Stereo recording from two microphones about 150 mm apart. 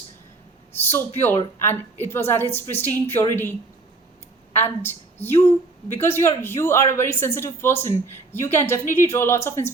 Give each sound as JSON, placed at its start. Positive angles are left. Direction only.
{"t": 0.8, "sound": "speech", "side_deg": 15}
{"t": 4.8, "sound": "speech", "side_deg": 15}